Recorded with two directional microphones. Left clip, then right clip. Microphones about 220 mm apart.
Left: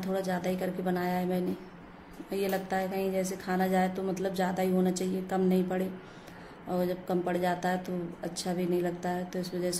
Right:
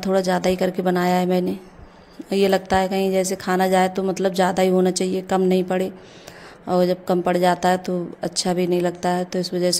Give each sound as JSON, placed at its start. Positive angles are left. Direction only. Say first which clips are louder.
{"t": 0.0, "sound": "a woman's voice", "louder": "right 12 dB", "side_deg": -40}